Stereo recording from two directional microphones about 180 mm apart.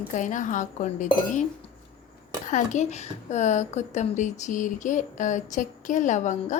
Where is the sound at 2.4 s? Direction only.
40° left (ahead or behind).